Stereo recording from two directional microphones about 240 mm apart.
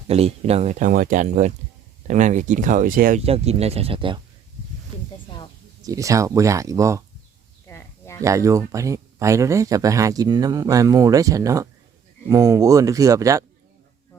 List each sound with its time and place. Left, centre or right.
0.1 s speech: right
5.8 s speech: centre
7.7 s a sound: centre
8.2 s speech: centre